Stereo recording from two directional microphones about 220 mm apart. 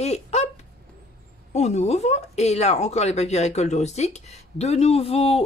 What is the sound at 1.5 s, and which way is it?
Speech, 30° left (ahead or behind).